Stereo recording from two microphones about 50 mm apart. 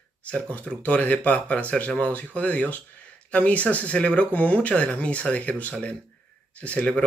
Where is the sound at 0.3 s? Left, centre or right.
Left.